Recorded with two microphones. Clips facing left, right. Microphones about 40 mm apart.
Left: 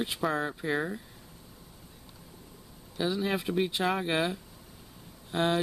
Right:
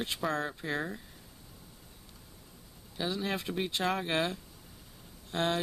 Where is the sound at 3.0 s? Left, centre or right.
Centre.